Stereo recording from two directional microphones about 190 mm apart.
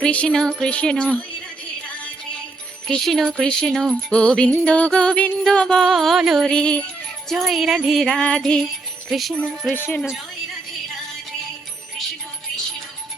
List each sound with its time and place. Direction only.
0.0 s music: 5° left (ahead or behind)
2.8 s music: centre (ahead or behind)
9.7 s speech: 10° left (ahead or behind)